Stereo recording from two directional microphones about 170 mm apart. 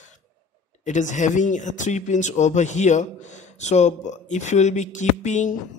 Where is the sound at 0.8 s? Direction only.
45° left (ahead or behind).